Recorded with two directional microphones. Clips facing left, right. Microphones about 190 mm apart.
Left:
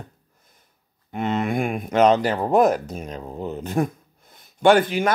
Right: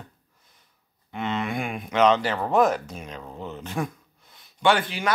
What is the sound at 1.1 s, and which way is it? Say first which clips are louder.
Speech: left 5 dB; 45° left (ahead or behind).